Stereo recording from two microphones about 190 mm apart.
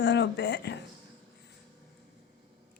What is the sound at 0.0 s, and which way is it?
Speech, 65° left (ahead or behind).